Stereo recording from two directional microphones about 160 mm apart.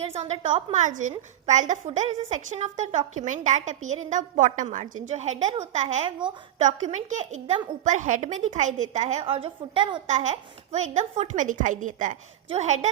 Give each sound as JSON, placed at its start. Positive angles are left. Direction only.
{"t": 0.0, "sound": "a woman's voice", "side_deg": -40}
{"t": 6.1, "sound": "a woman's voice", "side_deg": -30}
{"t": 6.6, "sound": "a woman's voice", "side_deg": -50}
{"t": 10.1, "sound": "a woman's voice", "side_deg": -45}